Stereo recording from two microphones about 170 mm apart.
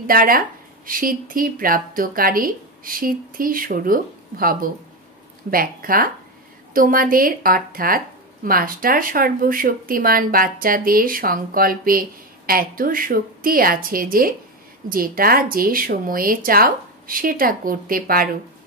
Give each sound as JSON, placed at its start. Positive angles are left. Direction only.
{"t": 0.0, "sound": "speech", "side_deg": -55}